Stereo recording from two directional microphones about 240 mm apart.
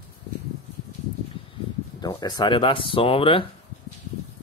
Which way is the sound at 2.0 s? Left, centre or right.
Centre.